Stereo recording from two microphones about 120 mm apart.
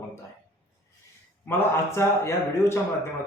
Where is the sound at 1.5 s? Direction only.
20° left (ahead or behind).